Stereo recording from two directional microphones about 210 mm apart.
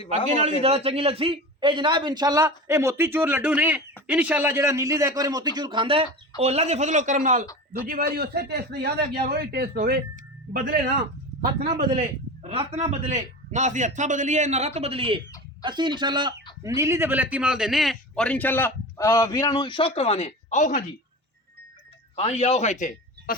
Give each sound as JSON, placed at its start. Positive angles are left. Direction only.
{"t": 0.3, "sound": "a man's voice", "side_deg": -30}
{"t": 11.9, "sound": "a man's voice", "side_deg": -30}
{"t": 22.1, "sound": "a man's voice", "side_deg": 30}